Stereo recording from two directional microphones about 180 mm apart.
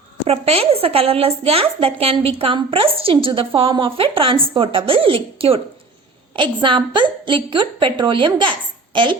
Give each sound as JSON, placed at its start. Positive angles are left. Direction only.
{"t": 0.3, "sound": "a woman's voice", "side_deg": -35}